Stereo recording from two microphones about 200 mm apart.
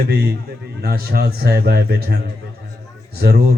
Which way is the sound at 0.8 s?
50° right (ahead or behind).